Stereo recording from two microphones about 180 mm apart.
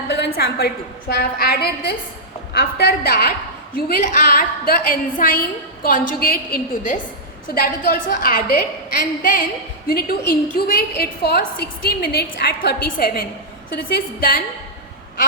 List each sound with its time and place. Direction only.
0.1 s a woman's voice: 65° left (ahead or behind)